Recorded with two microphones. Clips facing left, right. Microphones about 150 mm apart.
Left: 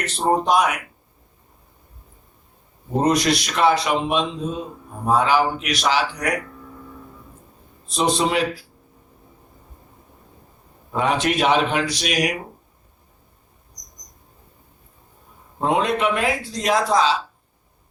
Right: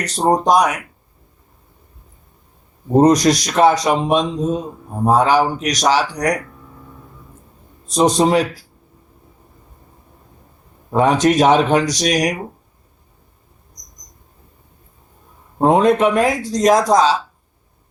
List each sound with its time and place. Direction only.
0.2 s a man's voice: 40° right (ahead or behind)
2.9 s a man's voice: 40° right (ahead or behind)
7.9 s a man's voice: 40° right (ahead or behind)
10.9 s a man's voice: 40° right (ahead or behind)
15.5 s speech: 45° right (ahead or behind)